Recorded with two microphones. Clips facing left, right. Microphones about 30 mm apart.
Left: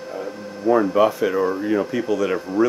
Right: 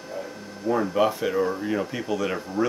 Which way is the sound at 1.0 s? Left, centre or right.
Centre.